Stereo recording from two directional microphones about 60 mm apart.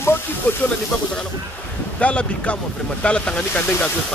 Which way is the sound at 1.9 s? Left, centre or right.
Centre.